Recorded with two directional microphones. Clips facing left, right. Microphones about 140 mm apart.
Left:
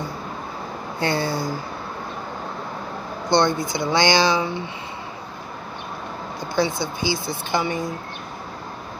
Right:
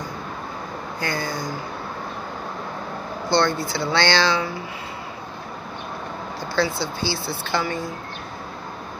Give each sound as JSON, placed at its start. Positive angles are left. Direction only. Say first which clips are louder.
{"t": 0.9, "sound": "a sound", "louder": "left 5 dB", "side_deg": 25}
{"t": 3.3, "sound": "speech", "louder": "left 2 dB", "side_deg": 20}
{"t": 6.5, "sound": "speech", "louder": "left 1 dB", "side_deg": 15}